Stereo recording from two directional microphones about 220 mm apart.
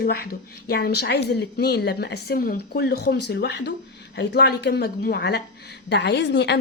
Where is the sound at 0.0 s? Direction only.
45° left (ahead or behind).